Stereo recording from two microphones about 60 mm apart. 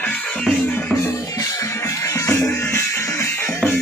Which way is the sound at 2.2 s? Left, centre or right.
Left.